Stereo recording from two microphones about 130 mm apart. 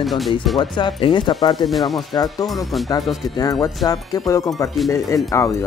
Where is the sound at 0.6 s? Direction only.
35° left (ahead or behind).